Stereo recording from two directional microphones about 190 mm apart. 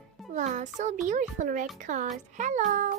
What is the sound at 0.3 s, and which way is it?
A child's voice, 40° right (ahead or behind).